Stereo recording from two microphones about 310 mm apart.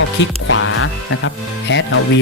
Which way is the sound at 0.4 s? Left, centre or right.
Left.